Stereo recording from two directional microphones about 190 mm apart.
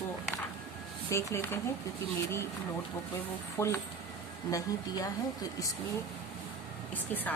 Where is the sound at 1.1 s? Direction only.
15° left (ahead or behind).